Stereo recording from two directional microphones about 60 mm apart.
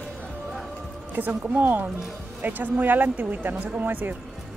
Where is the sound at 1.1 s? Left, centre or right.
Right.